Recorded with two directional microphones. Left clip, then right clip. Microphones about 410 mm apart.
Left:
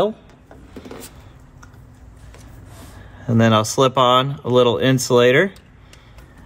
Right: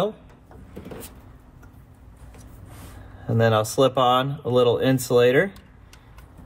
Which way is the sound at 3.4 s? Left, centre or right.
Centre.